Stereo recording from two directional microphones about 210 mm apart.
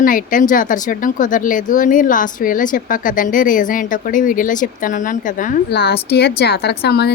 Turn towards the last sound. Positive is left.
turn(degrees=50)  # may be behind; listen again after turning